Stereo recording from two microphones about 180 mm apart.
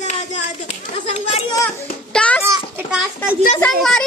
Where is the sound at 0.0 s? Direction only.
40° left (ahead or behind).